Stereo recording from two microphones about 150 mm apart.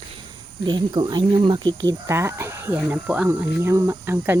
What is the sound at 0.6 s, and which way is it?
Speech, 30° right (ahead or behind).